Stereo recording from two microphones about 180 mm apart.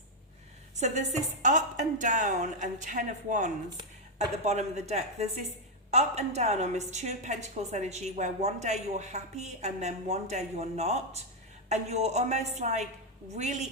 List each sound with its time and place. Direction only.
0.8 s a woman's voice: 40° right (ahead or behind)